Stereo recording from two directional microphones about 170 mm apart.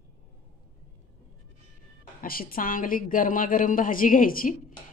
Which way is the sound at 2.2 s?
60° left (ahead or behind).